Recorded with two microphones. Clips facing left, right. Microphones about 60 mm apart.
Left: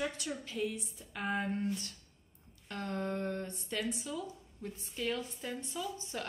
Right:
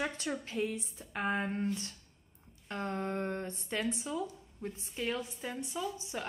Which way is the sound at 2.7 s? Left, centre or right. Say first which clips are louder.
Right 1 dB; right.